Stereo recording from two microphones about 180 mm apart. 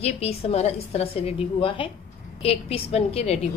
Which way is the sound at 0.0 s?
35° left (ahead or behind).